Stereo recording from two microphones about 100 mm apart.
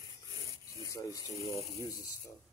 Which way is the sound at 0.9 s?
30° left (ahead or behind).